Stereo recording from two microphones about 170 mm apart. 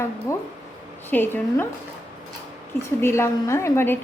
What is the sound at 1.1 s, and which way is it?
Speech, 10° left (ahead or behind).